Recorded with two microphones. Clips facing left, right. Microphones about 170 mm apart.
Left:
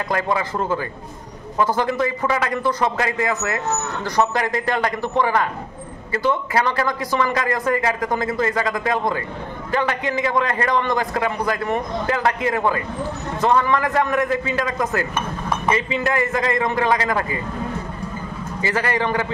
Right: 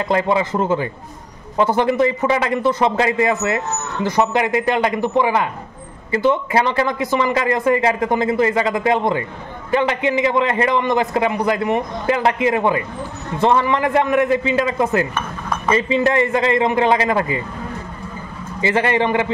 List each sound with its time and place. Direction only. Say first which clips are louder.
0.1 s a man's voice: right 5 dB; 20° right (ahead or behind)
18.6 s a man's voice: right 5 dB; 20° right (ahead or behind)